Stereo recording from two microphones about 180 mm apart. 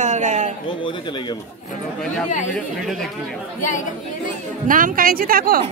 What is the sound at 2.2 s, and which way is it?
Speech, 45° left (ahead or behind).